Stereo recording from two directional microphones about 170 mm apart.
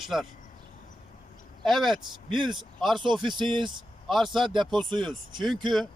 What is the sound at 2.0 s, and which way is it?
Speech, 30° right (ahead or behind).